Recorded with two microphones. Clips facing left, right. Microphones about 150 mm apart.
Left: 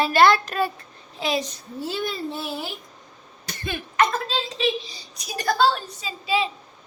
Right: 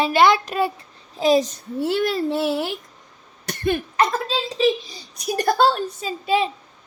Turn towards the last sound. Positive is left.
turn(degrees=-50)  # may be behind; listen again after turning